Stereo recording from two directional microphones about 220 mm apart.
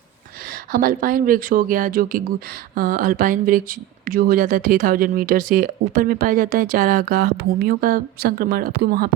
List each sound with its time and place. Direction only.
0.7 s speech: 40° right (ahead or behind)